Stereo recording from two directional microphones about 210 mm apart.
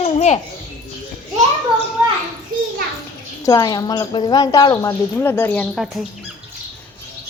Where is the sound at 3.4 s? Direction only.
20° left (ahead or behind).